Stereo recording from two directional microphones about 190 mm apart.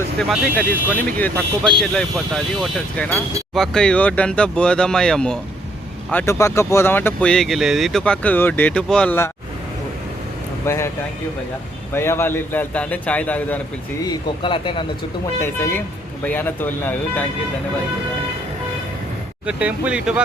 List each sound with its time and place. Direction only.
0.2 s speech: 5° left (ahead or behind)
10.7 s speech: 15° left (ahead or behind)
11.9 s speech: 10° left (ahead or behind)
14.0 s speech: 25° left (ahead or behind)
15.4 s speech: 10° left (ahead or behind)
19.5 s speech: 5° right (ahead or behind)